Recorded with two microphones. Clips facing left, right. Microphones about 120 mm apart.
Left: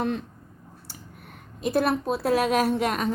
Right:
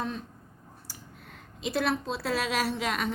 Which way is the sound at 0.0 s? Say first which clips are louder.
Left 7 dB; 70° left (ahead or behind).